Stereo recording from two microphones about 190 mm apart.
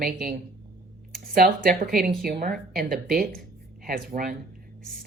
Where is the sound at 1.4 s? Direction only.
50° right (ahead or behind).